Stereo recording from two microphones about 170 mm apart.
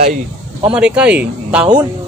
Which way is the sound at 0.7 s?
5° right (ahead or behind).